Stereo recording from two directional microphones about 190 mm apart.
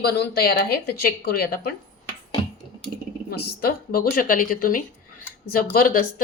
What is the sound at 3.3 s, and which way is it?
A woman's voice, 50° left (ahead or behind).